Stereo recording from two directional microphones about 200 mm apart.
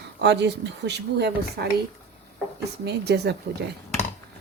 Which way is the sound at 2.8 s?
55° right (ahead or behind).